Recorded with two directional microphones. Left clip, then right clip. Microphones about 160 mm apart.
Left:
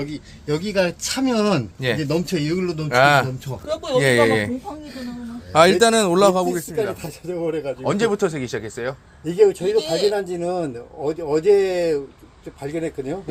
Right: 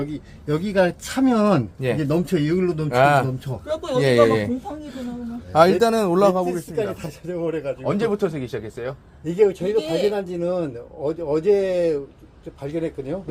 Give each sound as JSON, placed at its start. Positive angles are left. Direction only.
{"t": 0.0, "sound": "speech", "side_deg": -25}
{"t": 2.9, "sound": "a man's voice", "side_deg": 0}
{"t": 3.7, "sound": "speech", "side_deg": -65}
{"t": 4.0, "sound": "speech", "side_deg": -5}
{"t": 5.5, "sound": "speech", "side_deg": 5}
{"t": 6.7, "sound": "speech", "side_deg": 20}
{"t": 9.8, "sound": "speech", "side_deg": -55}
{"t": 10.2, "sound": "speech", "side_deg": 25}